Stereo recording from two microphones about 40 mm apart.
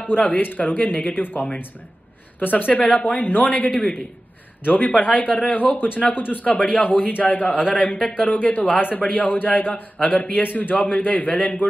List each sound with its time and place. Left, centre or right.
0.0 s a man's voice: left
6.4 s a man's voice: left
9.9 s speech: left
10.4 s a man's voice: left
11.2 s a man's voice: left